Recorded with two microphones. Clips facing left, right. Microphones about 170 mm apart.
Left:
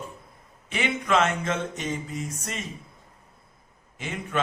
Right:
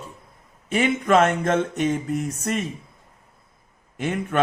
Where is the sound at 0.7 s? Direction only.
45° right (ahead or behind).